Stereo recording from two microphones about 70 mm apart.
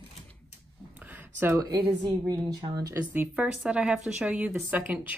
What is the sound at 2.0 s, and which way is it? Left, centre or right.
Speech, right.